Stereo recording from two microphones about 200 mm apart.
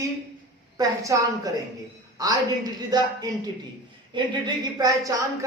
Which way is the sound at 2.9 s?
20° right (ahead or behind).